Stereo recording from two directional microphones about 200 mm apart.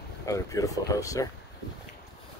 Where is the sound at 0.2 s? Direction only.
15° left (ahead or behind).